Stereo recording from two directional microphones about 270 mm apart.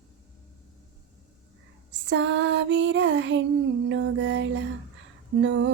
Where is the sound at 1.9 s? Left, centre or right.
Right.